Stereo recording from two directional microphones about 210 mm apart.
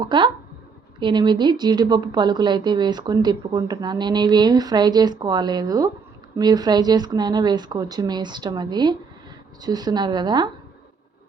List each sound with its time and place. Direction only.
0.0 s a woman's voice: 20° right (ahead or behind)